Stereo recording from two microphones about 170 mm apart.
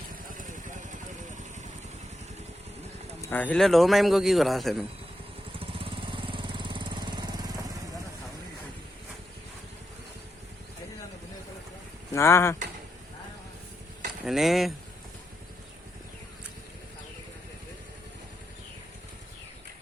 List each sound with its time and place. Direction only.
0.3 s vehicle: 50° right (ahead or behind)
3.2 s a man's voice: 10° left (ahead or behind)
5.5 s jackhammer: 30° right (ahead or behind)
12.1 s speech: 15° left (ahead or behind)
14.3 s a man's voice: centre (ahead or behind)